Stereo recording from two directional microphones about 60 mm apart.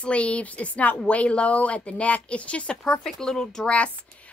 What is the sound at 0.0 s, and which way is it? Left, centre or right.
A woman's voice, centre.